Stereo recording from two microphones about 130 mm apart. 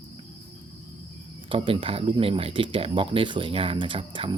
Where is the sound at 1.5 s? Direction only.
45° right (ahead or behind).